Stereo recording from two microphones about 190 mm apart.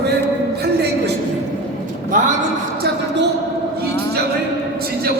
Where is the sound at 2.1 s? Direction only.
40° right (ahead or behind).